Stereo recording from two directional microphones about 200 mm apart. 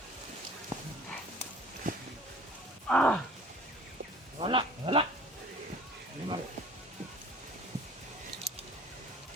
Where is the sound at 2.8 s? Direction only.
5° left (ahead or behind).